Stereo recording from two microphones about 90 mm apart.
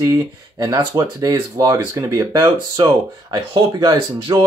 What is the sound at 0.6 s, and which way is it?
Speech, 40° right (ahead or behind).